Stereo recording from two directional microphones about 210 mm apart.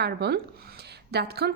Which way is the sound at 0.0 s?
50° right (ahead or behind).